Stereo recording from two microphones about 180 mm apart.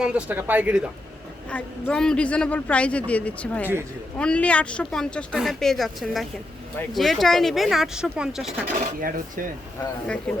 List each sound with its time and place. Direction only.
0.0 s speech: 5° right (ahead or behind)
1.5 s a man's voice: 5° left (ahead or behind)
9.0 s speech: 50° right (ahead or behind)
10.3 s a man's voice: 5° left (ahead or behind)